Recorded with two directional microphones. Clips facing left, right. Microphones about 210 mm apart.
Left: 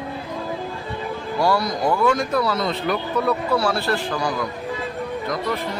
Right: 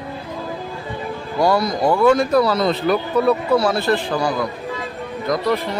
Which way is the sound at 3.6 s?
20° right (ahead or behind).